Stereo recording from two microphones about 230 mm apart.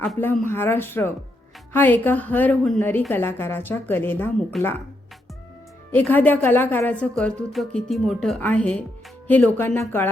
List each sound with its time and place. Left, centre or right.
0.0 s a woman's voice: centre
5.9 s a woman's voice: centre